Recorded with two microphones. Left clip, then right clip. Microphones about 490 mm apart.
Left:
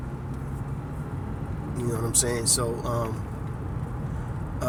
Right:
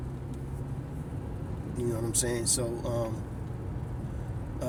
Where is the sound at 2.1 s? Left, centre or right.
Right.